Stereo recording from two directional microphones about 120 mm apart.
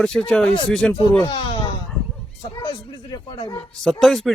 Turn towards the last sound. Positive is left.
turn(degrees=0)  # may be behind; listen again after turning